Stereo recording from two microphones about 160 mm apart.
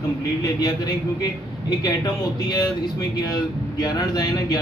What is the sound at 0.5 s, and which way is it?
Speech, 25° left (ahead or behind).